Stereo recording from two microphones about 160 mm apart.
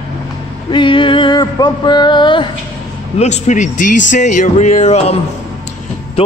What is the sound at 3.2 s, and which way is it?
Speech, 45° left (ahead or behind).